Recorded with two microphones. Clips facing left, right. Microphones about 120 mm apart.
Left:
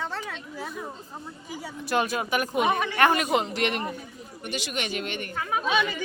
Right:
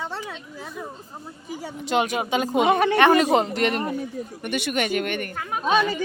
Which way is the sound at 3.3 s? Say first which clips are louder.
Right 4 dB; 40° right (ahead or behind).